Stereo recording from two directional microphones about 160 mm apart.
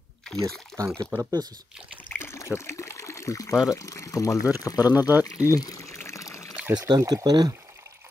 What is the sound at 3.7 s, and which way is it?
Speech, 20° left (ahead or behind).